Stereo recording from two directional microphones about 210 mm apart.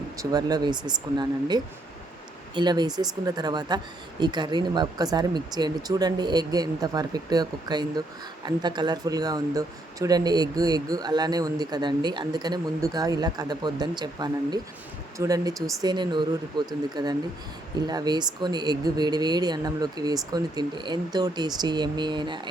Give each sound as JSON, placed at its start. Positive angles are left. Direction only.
{"t": 0.2, "sound": "speech", "side_deg": -20}